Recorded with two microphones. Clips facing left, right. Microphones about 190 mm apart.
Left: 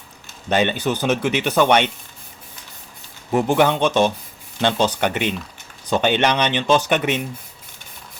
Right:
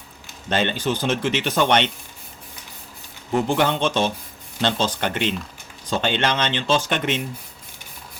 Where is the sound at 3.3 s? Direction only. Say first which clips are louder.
Left 3 dB; 15° left (ahead or behind).